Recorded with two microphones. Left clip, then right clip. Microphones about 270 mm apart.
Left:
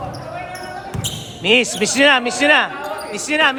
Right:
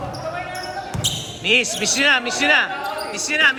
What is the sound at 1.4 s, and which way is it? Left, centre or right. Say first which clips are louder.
Speech: left 3 dB; left.